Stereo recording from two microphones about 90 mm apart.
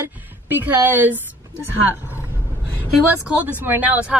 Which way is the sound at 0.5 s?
20° right (ahead or behind).